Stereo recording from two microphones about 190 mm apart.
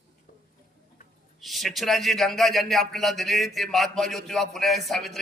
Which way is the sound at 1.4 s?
Centre (ahead or behind).